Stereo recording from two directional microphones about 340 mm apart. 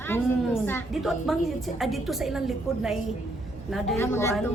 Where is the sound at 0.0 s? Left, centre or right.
Centre.